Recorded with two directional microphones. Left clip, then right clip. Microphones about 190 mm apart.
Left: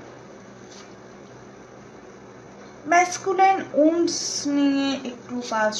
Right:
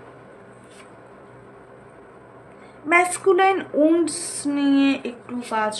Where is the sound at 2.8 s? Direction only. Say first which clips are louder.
Right 2 dB; 35° right (ahead or behind).